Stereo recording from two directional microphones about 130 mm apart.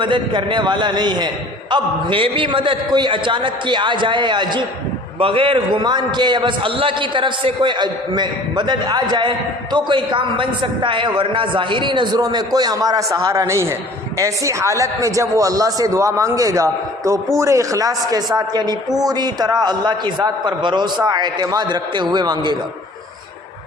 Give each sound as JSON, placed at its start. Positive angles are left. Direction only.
{"t": 0.0, "sound": "a man's voice", "side_deg": -35}